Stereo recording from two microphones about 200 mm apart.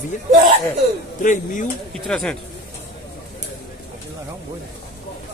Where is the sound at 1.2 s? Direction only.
40° left (ahead or behind).